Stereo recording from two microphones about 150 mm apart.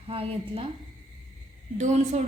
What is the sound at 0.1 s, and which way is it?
Speech, 40° right (ahead or behind).